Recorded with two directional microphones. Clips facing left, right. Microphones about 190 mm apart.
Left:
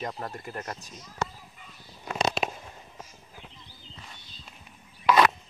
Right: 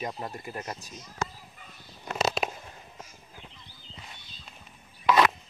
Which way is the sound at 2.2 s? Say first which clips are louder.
Even; centre (ahead or behind).